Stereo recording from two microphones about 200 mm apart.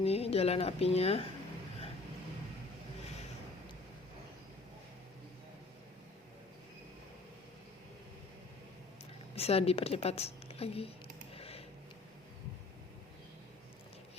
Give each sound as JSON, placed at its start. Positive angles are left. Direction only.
{"t": 0.0, "sound": "speech", "side_deg": 30}
{"t": 9.3, "sound": "a woman's voice", "side_deg": 30}
{"t": 11.3, "sound": "a sound", "side_deg": 30}